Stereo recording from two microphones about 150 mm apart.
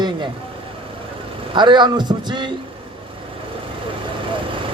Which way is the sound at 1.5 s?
30° right (ahead or behind).